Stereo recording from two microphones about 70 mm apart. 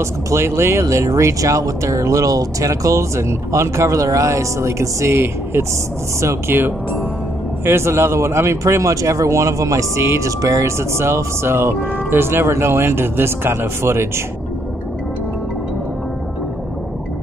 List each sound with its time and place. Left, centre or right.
0.0 s speech: right